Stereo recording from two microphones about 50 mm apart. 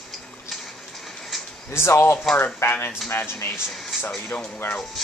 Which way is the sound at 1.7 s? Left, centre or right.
Left.